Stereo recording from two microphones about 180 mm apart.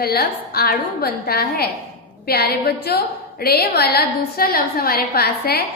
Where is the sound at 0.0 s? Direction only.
60° left (ahead or behind).